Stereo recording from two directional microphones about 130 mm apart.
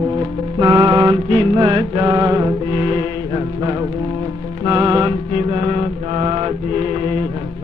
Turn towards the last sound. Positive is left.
turn(degrees=-50)  # may be behind; listen again after turning